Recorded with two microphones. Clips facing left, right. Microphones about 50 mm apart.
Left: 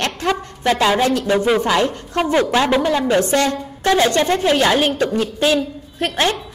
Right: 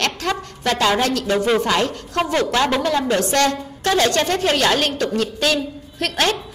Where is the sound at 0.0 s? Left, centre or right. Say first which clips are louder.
Left 2 dB; centre.